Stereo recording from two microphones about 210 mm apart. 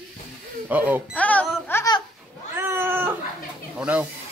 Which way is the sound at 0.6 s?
10° right (ahead or behind).